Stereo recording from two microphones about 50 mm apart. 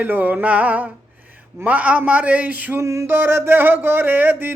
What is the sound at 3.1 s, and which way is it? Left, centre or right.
Music, right.